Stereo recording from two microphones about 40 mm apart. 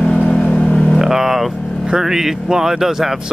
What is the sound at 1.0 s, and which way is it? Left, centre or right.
Speech, centre.